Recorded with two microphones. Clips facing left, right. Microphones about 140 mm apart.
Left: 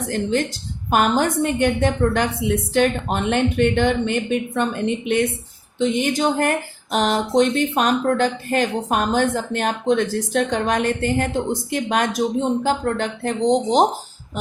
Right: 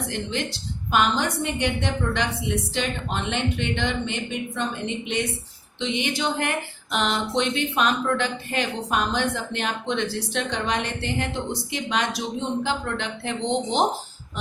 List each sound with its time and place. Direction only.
0.0 s speech: 45° left (ahead or behind)